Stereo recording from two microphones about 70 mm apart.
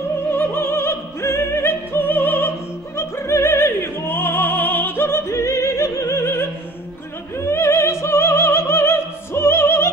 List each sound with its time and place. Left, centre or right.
0.3 s opera: left
3.0 s opera: left